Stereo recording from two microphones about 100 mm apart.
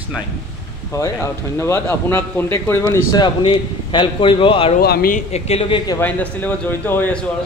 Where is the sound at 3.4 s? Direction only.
60° left (ahead or behind).